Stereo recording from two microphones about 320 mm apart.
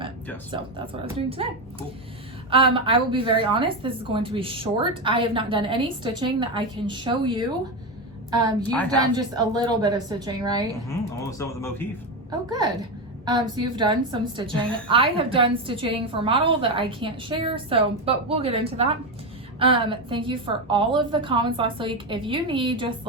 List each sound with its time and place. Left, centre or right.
1.0 s a woman's voice: centre
2.5 s a woman's voice: centre
8.7 s a woman's voice: centre
9.1 s a woman's voice: centre
10.8 s a man's voice: centre
12.5 s a woman's voice: centre